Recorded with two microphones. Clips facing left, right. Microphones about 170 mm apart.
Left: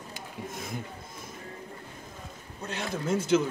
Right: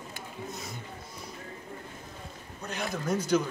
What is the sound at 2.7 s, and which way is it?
Speech, 25° left (ahead or behind).